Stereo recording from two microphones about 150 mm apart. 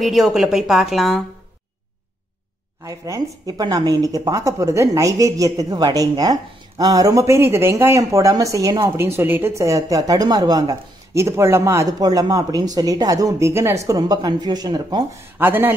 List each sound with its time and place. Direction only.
0.0 s a woman's voice: centre (ahead or behind)
2.8 s speech: 20° right (ahead or behind)
15.3 s speech: 15° right (ahead or behind)